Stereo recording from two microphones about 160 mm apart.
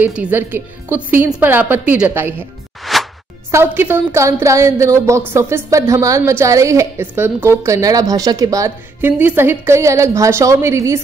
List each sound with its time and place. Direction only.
0.0 s a woman's voice: 10° right (ahead or behind)
2.8 s music: centre (ahead or behind)
3.5 s a woman's voice: 15° right (ahead or behind)